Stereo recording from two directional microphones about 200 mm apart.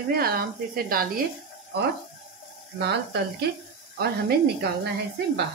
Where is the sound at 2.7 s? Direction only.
55° right (ahead or behind).